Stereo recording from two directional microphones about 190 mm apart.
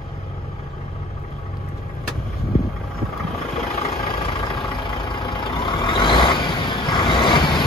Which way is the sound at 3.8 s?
30° left (ahead or behind).